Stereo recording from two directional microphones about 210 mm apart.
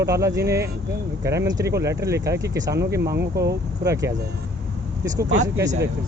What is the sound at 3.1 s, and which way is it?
Speech, 50° right (ahead or behind).